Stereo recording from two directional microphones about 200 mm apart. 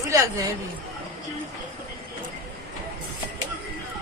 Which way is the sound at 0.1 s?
15° right (ahead or behind).